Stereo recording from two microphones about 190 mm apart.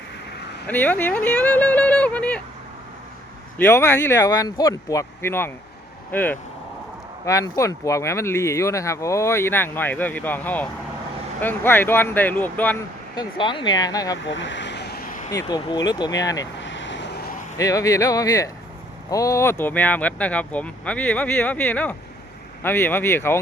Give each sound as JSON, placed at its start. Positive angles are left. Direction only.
{"t": 0.7, "sound": "speech", "side_deg": 10}
{"t": 3.6, "sound": "speech", "side_deg": 15}
{"t": 13.1, "sound": "speech", "side_deg": 25}
{"t": 14.2, "sound": "vehicle", "side_deg": 75}
{"t": 15.3, "sound": "speech", "side_deg": 20}
{"t": 16.6, "sound": "vehicle", "side_deg": 75}
{"t": 17.6, "sound": "speech", "side_deg": 15}